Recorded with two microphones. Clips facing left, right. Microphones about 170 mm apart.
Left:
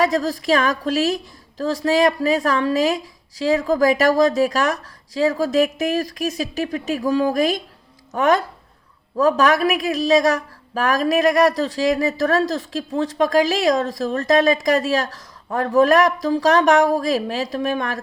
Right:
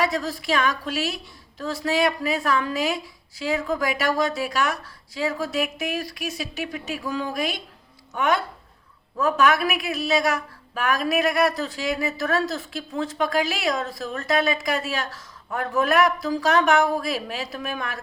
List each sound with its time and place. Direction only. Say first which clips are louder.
0.0 s speech: left 6 dB; 40° left (ahead or behind)